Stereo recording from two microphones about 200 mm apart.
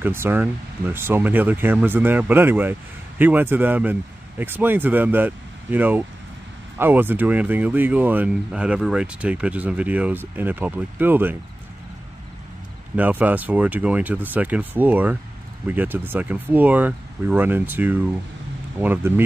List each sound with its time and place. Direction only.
0.0 s speech: 10° right (ahead or behind)
12.9 s speech: 10° right (ahead or behind)